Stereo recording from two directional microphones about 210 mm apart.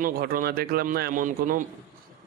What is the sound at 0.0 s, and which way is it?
Speech, 40° right (ahead or behind).